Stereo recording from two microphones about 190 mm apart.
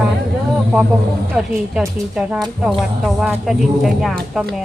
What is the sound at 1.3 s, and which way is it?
A woman's voice, 5° right (ahead or behind).